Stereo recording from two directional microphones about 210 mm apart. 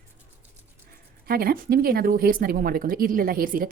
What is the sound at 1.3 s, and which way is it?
Speech, 45° right (ahead or behind).